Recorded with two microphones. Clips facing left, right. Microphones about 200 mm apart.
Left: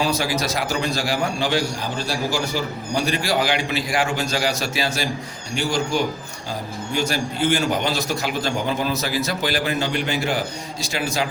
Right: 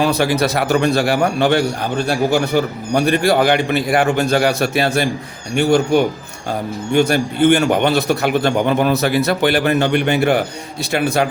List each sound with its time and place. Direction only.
0.0 s a man's voice: 60° right (ahead or behind)